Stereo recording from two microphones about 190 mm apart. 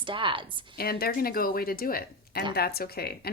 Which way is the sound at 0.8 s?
55° left (ahead or behind).